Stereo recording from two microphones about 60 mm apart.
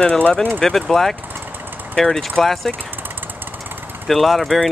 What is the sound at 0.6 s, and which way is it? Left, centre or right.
Speech, centre.